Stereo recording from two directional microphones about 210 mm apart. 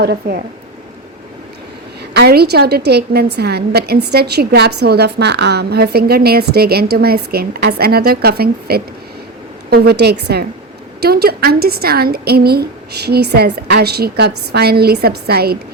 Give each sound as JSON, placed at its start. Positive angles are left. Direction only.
{"t": 0.0, "sound": "a woman's voice", "side_deg": -50}
{"t": 2.1, "sound": "a woman's voice", "side_deg": -50}